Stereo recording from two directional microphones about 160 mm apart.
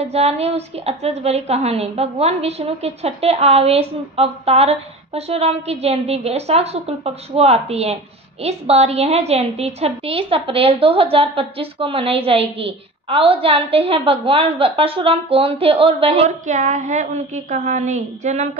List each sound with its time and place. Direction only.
0.1 s a woman's voice: 40° right (ahead or behind)